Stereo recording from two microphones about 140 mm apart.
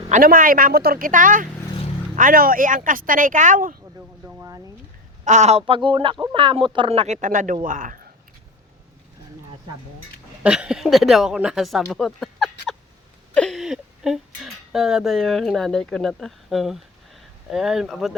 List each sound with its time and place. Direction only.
0.1 s a woman's voice: 85° right
4.3 s a sound: 20° right (ahead or behind)
5.2 s speech: 55° right (ahead or behind)
7.2 s speech: 65° right (ahead or behind)
10.4 s speech: 5° right (ahead or behind)